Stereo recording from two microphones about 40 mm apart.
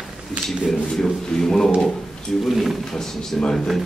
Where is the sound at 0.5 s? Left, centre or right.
Centre.